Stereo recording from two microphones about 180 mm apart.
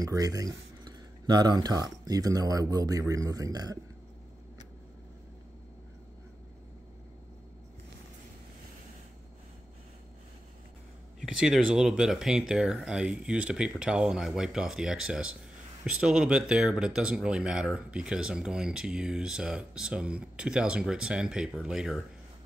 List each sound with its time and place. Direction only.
0.0 s a man's voice: 20° right (ahead or behind)
11.1 s speech: 5° right (ahead or behind)